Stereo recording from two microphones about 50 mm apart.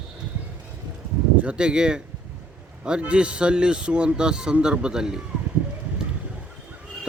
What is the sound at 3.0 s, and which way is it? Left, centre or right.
Speech, right.